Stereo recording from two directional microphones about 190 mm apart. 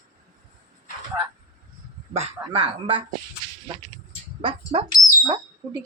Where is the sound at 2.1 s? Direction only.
30° right (ahead or behind).